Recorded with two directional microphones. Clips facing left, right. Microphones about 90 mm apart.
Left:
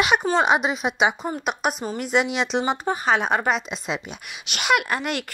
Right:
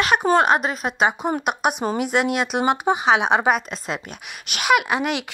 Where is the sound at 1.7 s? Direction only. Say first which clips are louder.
Right 5 dB; 60° right (ahead or behind).